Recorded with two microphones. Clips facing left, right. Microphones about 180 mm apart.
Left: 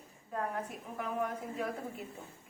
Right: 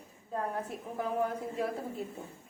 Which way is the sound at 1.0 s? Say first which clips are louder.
Right 4 dB; 30° right (ahead or behind).